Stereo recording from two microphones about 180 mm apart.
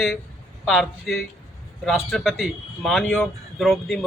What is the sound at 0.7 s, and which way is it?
A man's voice, 5° left (ahead or behind).